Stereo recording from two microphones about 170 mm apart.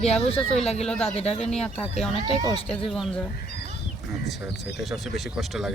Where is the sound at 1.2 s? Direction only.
35° left (ahead or behind).